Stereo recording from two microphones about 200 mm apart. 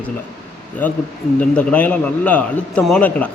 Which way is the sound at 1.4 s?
5° left (ahead or behind).